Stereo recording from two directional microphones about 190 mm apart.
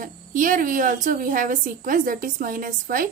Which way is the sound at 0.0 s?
45° right (ahead or behind).